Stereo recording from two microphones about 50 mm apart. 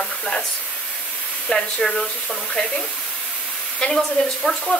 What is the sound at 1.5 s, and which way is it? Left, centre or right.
Speech, centre.